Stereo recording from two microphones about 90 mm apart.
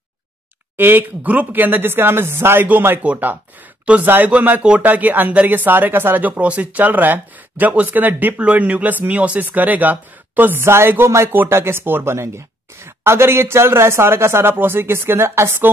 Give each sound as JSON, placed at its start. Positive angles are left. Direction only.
{"t": 0.7, "sound": "speech", "side_deg": -20}